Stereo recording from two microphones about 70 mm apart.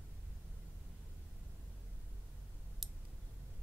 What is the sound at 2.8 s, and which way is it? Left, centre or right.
Clicking, centre.